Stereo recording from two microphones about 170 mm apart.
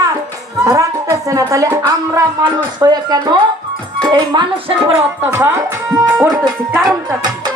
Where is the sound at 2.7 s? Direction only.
25° right (ahead or behind).